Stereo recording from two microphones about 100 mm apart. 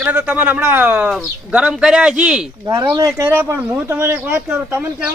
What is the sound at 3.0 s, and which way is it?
Speech, 30° right (ahead or behind).